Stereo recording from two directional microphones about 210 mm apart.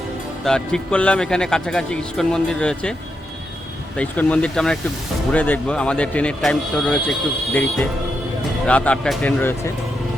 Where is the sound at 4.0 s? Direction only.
5° left (ahead or behind).